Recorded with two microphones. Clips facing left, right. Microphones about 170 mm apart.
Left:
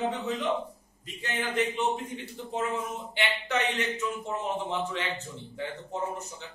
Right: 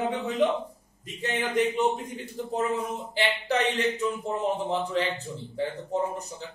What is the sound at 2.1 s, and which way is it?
A man's voice, 40° right (ahead or behind).